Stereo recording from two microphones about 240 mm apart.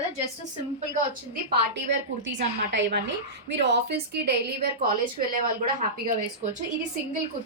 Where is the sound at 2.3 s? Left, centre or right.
Right.